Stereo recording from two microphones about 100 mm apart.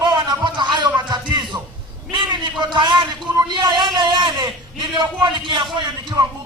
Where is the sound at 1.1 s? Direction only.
50° right (ahead or behind).